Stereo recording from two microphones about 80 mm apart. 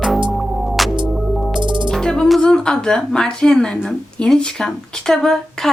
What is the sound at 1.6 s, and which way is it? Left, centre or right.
Music, right.